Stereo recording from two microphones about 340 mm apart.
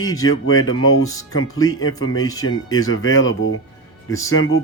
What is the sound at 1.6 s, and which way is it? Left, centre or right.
Speech, left.